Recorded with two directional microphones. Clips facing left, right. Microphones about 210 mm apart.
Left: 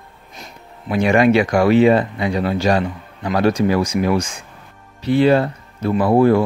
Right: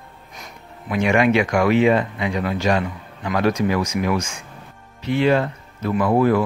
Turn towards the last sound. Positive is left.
turn(degrees=30)  # may be behind; listen again after turning